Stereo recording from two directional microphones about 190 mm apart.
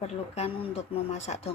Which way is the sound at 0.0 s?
35° left (ahead or behind).